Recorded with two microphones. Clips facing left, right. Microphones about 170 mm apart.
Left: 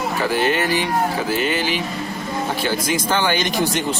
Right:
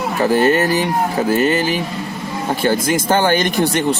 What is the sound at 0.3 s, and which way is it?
Speech, 45° right (ahead or behind).